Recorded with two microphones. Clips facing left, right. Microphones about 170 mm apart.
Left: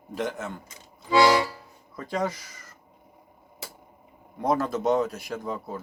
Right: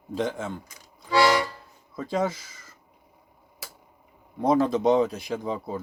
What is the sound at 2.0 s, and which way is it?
Speech, 5° right (ahead or behind).